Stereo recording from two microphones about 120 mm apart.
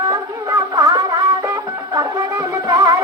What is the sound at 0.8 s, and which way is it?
Music, 35° right (ahead or behind).